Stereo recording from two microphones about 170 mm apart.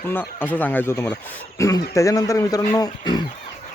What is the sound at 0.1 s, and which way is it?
Speech, 10° left (ahead or behind).